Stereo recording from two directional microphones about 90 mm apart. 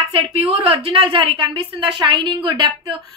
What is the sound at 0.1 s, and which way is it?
A woman's voice, 90° right.